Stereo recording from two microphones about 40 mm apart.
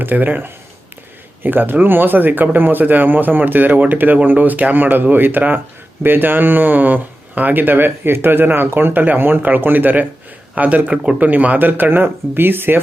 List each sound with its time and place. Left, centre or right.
0.0 s speech: right
1.5 s speech: right